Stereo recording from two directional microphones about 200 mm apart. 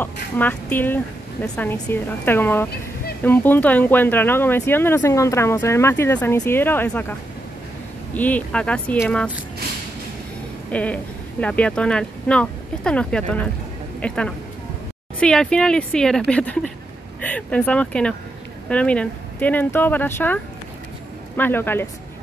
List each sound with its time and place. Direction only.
0.0 s speech: 10° left (ahead or behind)
10.7 s a sound: 5° left (ahead or behind)
11.4 s speech: 5° left (ahead or behind)
21.4 s speech: 10° left (ahead or behind)